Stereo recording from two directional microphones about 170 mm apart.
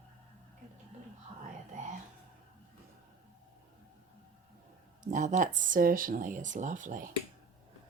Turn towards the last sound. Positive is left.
turn(degrees=-50)  # may be behind; listen again after turning